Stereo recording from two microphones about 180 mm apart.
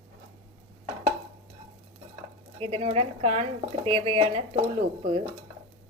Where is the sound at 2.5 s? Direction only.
35° right (ahead or behind).